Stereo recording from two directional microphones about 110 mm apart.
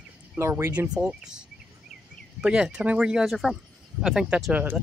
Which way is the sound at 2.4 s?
10° right (ahead or behind).